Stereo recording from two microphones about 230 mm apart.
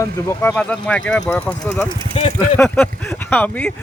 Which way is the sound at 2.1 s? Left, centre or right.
Left.